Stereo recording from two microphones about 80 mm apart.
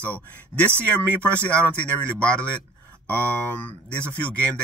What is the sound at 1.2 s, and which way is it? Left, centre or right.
Speech, centre.